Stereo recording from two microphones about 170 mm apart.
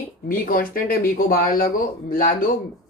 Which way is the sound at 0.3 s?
55° left (ahead or behind).